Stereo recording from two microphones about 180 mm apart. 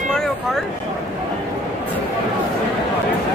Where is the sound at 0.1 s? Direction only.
Centre (ahead or behind).